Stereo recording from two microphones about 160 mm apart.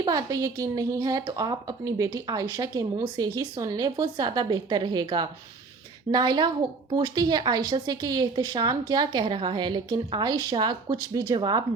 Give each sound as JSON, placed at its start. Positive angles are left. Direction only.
{"t": 0.0, "sound": "a woman's voice", "side_deg": -20}